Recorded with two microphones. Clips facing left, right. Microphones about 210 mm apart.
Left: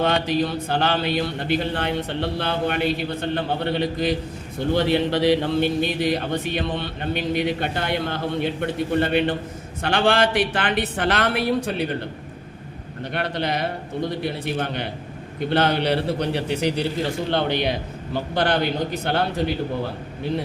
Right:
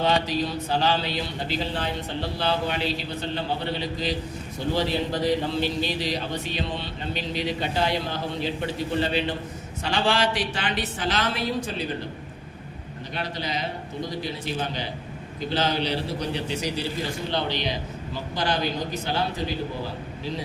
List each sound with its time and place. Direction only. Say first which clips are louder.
0.0 s a man's voice: left 3 dB; 55° left (ahead or behind)
13.1 s a man's voice: left 5 dB; 60° left (ahead or behind)